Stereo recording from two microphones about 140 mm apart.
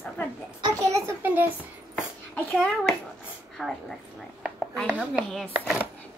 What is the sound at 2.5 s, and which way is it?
A child's voice, 5° left (ahead or behind).